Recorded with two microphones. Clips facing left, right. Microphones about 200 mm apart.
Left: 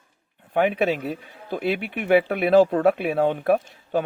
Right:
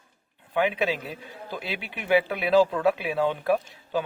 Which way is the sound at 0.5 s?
50° left (ahead or behind).